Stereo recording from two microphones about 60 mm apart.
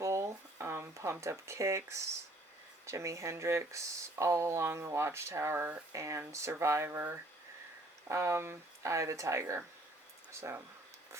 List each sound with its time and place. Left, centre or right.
0.0 s a sound: right
1.2 s speech: right
5.9 s speech: right
6.8 s speech: right
8.0 s speech: right